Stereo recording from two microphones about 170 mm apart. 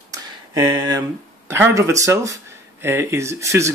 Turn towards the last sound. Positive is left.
turn(degrees=-15)  # may be behind; listen again after turning